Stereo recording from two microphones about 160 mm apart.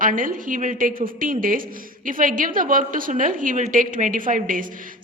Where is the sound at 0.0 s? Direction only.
60° right (ahead or behind).